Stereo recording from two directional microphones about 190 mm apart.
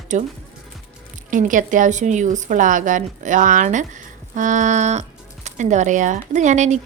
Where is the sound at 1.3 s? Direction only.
45° right (ahead or behind).